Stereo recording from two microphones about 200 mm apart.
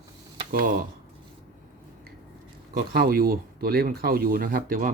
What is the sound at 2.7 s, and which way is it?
Speech, 50° right (ahead or behind).